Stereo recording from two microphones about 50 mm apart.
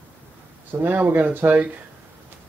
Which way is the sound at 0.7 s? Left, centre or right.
Right.